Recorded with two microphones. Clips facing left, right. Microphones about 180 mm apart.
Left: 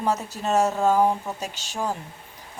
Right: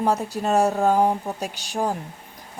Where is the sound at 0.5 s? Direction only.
15° right (ahead or behind).